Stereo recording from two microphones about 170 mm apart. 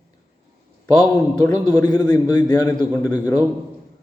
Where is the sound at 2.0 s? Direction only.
25° left (ahead or behind).